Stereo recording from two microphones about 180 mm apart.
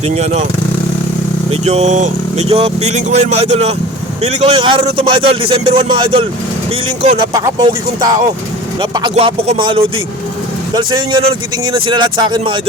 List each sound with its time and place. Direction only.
1.5 s a man's voice: 40° right (ahead or behind)
7.3 s speech: 25° right (ahead or behind)
8.8 s speech: 25° right (ahead or behind)